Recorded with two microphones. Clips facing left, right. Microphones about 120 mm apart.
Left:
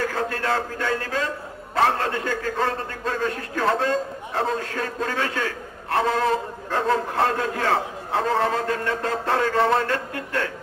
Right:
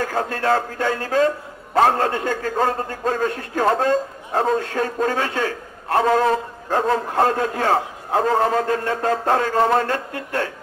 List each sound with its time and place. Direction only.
0.1 s a man's voice: 40° right (ahead or behind)